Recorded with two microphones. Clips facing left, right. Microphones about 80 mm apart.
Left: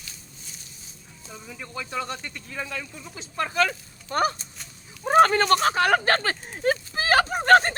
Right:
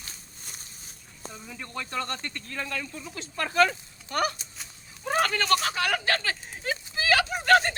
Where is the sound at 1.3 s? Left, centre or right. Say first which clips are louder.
Left 2 dB; centre.